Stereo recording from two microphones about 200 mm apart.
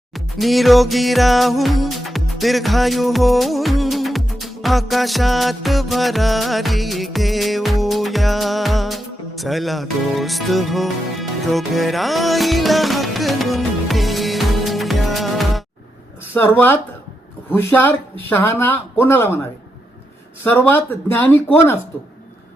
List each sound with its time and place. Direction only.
0.1 s music: centre (ahead or behind)
16.3 s speech: 10° left (ahead or behind)
20.4 s speech: 10° left (ahead or behind)